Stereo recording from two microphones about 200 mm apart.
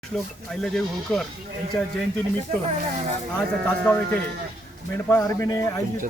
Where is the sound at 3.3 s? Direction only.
5° left (ahead or behind).